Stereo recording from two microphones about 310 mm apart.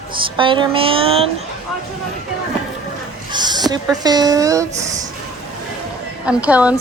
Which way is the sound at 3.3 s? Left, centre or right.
Centre.